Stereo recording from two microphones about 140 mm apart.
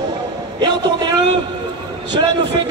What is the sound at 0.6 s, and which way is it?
Speech, 30° right (ahead or behind).